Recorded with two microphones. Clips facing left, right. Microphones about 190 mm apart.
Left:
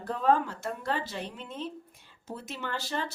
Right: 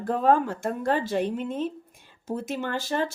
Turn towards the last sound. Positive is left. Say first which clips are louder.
# right 7 dB
turn(degrees=-50)  # may be behind; listen again after turning